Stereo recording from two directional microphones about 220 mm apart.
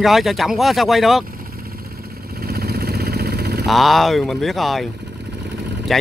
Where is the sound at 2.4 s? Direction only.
45° right (ahead or behind).